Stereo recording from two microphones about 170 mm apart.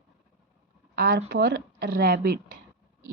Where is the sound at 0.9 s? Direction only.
65° right (ahead or behind).